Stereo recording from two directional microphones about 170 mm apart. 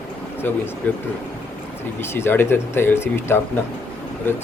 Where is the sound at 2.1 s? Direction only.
15° left (ahead or behind).